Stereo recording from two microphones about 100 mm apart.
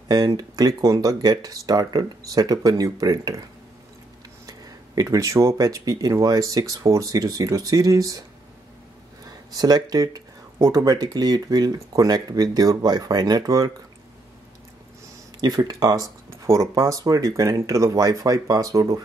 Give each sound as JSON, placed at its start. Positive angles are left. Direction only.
{"t": 0.1, "sound": "speech", "side_deg": -40}
{"t": 4.5, "sound": "speech", "side_deg": -35}
{"t": 9.5, "sound": "speech", "side_deg": -40}
{"t": 15.4, "sound": "speech", "side_deg": -40}